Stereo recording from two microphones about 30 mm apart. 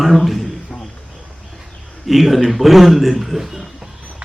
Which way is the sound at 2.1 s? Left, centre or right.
Centre.